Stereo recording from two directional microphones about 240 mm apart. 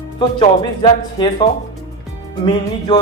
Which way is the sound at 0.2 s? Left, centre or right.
Left.